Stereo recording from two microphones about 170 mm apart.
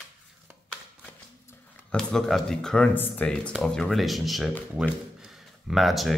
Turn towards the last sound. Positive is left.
turn(degrees=0)  # may be behind; listen again after turning